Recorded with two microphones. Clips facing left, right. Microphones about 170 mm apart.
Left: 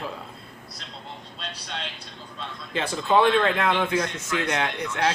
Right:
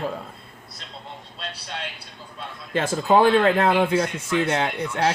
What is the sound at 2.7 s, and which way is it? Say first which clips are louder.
Speech: right 3 dB; 45° right (ahead or behind).